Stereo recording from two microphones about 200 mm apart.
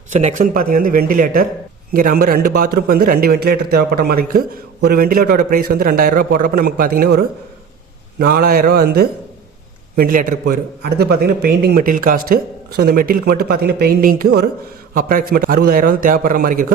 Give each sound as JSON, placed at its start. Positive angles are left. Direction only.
{"t": 0.1, "sound": "a man's voice", "side_deg": -35}
{"t": 10.4, "sound": "a man's voice", "side_deg": -55}